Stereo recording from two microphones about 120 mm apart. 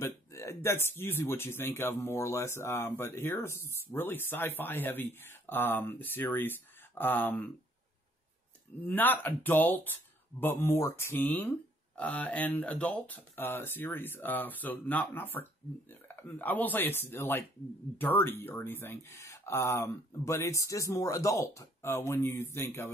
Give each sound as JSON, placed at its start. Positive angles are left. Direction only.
{"t": 0.0, "sound": "speech", "side_deg": 25}
{"t": 8.8, "sound": "speech", "side_deg": 15}